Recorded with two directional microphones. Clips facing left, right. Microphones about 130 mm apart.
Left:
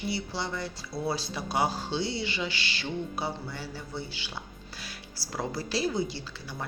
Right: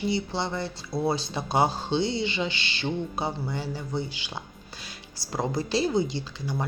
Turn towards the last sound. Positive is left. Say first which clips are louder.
# right 7 dB
turn(degrees=-20)  # may be behind; listen again after turning